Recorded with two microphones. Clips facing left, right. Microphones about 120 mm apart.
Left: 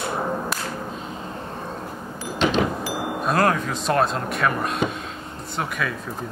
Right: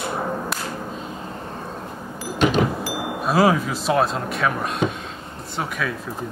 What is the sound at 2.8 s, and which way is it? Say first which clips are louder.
Speech: even; centre (ahead or behind).